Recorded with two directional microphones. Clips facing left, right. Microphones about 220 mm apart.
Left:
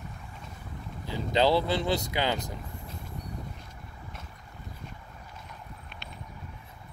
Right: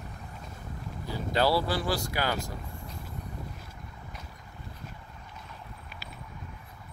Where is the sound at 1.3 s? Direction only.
20° left (ahead or behind).